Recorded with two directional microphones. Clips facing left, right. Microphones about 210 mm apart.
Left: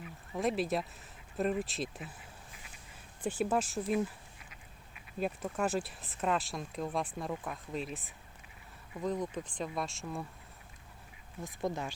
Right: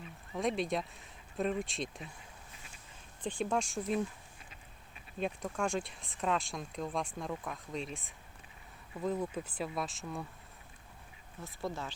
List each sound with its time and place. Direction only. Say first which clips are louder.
0.3 s speech: left 1 dB; 5° left (ahead or behind)
3.2 s speech: left 2 dB; 5° left (ahead or behind)
5.2 s speech: left 1 dB; 5° left (ahead or behind)
11.4 s speech: left 3 dB; 15° left (ahead or behind)